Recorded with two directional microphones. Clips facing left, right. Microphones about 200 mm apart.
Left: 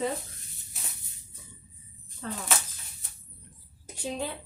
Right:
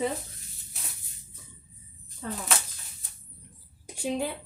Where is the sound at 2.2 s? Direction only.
10° right (ahead or behind).